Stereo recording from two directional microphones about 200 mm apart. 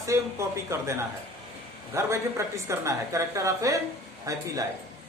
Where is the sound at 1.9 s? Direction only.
15° right (ahead or behind).